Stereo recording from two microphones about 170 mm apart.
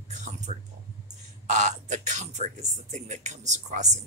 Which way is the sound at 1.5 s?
45° right (ahead or behind).